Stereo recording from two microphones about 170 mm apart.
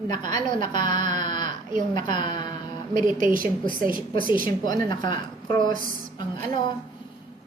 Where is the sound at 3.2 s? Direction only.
50° right (ahead or behind).